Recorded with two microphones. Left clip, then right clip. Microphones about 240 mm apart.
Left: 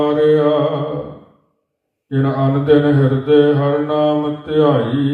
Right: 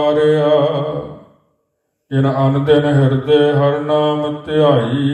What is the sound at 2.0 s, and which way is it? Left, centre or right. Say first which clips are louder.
Mantra: right 2 dB; right.